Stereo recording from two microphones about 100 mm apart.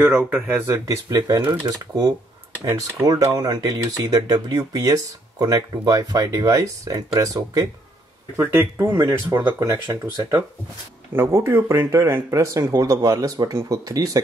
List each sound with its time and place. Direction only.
0.3 s speech: 20° right (ahead or behind)
1.0 s speech: 40° right (ahead or behind)
2.6 s speech: 30° right (ahead or behind)
9.8 s speech: 45° right (ahead or behind)
11.1 s speech: 25° right (ahead or behind)